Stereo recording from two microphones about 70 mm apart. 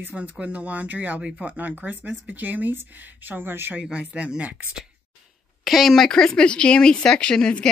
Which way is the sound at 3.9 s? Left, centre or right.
Centre.